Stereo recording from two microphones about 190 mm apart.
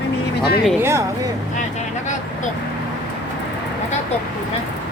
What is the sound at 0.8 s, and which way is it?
Speech, 15° right (ahead or behind).